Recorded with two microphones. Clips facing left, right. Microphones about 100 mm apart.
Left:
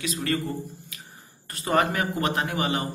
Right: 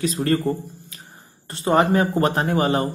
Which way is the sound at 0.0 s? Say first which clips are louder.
Right 7 dB; 35° right (ahead or behind).